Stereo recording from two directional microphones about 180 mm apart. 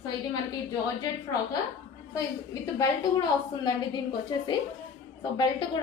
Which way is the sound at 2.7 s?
20° left (ahead or behind).